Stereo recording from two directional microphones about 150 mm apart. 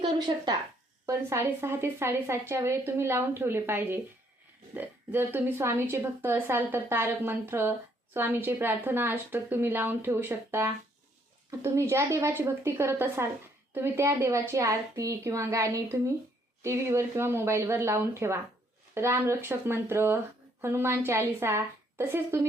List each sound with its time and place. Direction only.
0.0 s speech: 30° right (ahead or behind)
1.0 s a woman's voice: 15° right (ahead or behind)